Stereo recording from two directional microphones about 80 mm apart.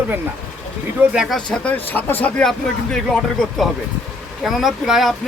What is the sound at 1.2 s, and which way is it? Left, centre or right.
Speech, centre.